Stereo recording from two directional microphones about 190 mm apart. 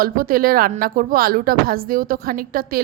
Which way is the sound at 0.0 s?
50° right (ahead or behind).